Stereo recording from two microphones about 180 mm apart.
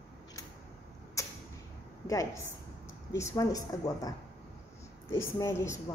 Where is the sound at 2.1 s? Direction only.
20° left (ahead or behind).